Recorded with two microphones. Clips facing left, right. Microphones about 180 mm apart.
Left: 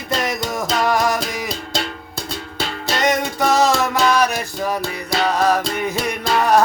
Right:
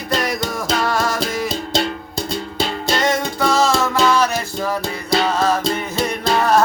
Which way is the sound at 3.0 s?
15° left (ahead or behind).